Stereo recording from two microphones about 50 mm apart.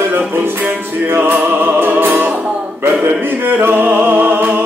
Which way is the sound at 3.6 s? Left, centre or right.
Right.